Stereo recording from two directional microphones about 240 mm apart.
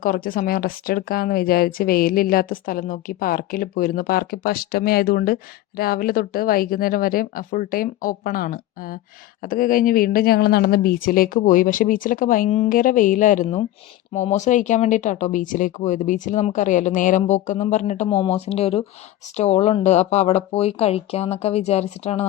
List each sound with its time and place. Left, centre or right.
0.0 s a woman's voice: left